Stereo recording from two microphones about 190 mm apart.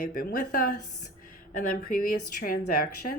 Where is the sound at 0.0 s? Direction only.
50° left (ahead or behind).